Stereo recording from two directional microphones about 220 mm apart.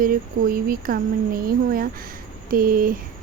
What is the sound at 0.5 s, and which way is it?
Speech, 40° right (ahead or behind).